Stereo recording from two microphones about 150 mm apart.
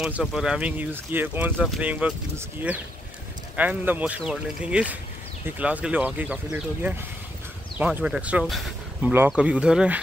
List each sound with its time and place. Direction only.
0.0 s speech: centre (ahead or behind)